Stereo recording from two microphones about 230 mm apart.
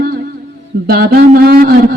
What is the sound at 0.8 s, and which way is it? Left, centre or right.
Speech, right.